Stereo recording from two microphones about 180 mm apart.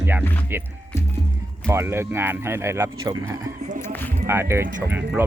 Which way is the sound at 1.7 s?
15° right (ahead or behind).